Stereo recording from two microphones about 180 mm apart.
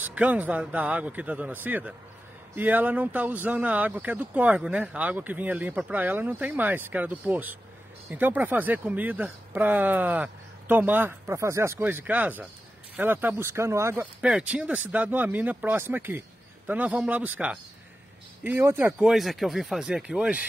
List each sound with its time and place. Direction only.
0.0 s speech: 10° right (ahead or behind)